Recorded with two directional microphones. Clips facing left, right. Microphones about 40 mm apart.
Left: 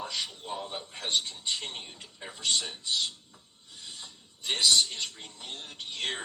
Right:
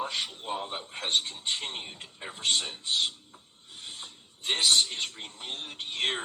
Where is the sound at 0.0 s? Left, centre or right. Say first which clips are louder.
Right 3 dB; right.